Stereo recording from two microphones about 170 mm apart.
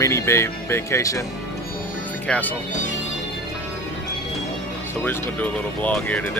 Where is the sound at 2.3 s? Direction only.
10° left (ahead or behind).